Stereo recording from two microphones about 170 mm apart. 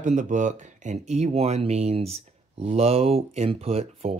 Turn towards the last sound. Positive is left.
turn(degrees=-35)  # may be behind; listen again after turning